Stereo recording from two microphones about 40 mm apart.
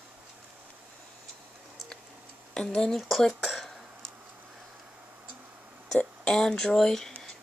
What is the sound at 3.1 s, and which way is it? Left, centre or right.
Speech, centre.